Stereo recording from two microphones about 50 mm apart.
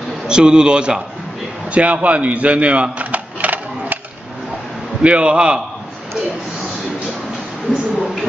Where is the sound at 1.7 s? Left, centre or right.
Right.